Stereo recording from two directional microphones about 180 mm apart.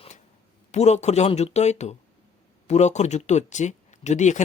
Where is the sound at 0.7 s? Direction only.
40° left (ahead or behind).